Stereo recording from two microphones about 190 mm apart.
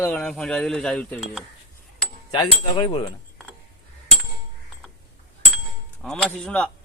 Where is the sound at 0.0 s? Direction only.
5° left (ahead or behind).